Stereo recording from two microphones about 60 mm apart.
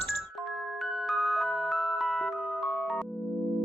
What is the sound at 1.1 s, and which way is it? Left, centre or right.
Music, centre.